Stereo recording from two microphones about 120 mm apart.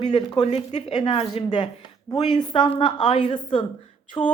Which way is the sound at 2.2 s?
40° left (ahead or behind).